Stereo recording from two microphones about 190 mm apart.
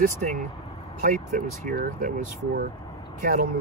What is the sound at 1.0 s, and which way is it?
Speech, 45° right (ahead or behind).